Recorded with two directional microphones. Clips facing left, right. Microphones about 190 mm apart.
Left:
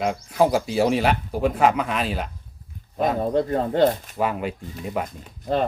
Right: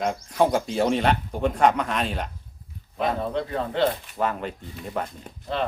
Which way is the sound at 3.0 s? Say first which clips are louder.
Left 4 dB; 45° left (ahead or behind).